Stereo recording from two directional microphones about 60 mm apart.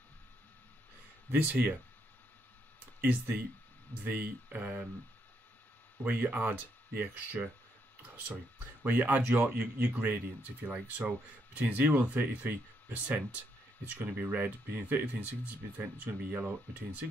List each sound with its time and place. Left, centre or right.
1.3 s speech: right
3.0 s speech: right
6.0 s speech: right
8.8 s speech: right